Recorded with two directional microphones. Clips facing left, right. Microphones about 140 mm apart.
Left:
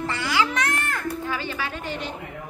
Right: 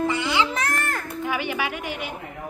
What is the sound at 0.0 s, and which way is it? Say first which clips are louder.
Baby cry: right 2 dB; 20° right (ahead or behind).